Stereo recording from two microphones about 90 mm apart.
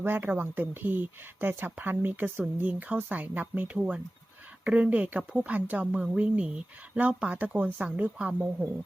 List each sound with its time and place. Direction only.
0.0 s speech: 25° right (ahead or behind)